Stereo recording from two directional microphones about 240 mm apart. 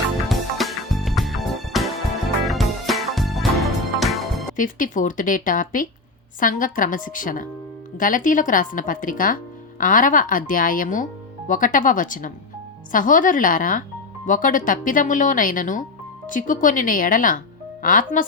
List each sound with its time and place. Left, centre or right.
0.3 s music: centre
4.5 s speech: left